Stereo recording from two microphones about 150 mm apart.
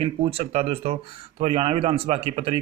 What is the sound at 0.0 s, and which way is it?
Speech, 40° right (ahead or behind).